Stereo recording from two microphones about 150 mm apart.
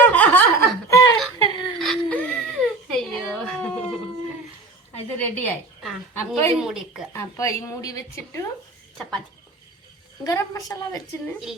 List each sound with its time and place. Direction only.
0.0 s chuckle: 10° left (ahead or behind)
1.4 s whimper: 30° left (ahead or behind)
1.8 s baby cry: 5° left (ahead or behind)
5.2 s a sound: 10° left (ahead or behind)
6.1 s a woman's voice: 15° left (ahead or behind)
6.6 s speech: 5° right (ahead or behind)
7.1 s speech: 20° left (ahead or behind)
10.2 s speech: 20° left (ahead or behind)